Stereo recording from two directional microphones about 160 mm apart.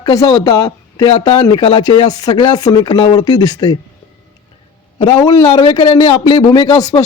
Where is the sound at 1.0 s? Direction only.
40° left (ahead or behind).